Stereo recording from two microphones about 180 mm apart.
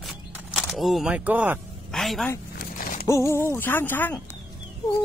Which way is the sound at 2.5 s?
55° left (ahead or behind).